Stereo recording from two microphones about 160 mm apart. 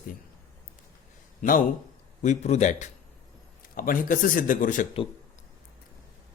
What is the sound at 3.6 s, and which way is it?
A man's voice, 60° left (ahead or behind).